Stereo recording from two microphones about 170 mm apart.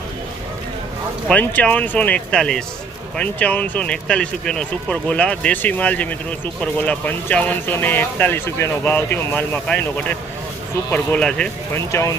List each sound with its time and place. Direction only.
1.3 s speech: 10° left (ahead or behind)
11.9 s speech: 15° left (ahead or behind)